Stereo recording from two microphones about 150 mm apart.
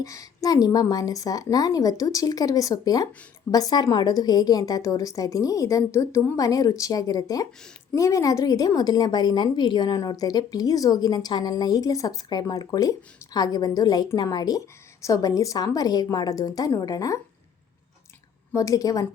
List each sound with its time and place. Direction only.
0.0 s a woman's voice: 20° left (ahead or behind)
18.5 s a woman's voice: 20° left (ahead or behind)